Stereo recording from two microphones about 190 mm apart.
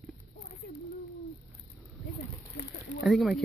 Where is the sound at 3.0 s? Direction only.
Centre (ahead or behind).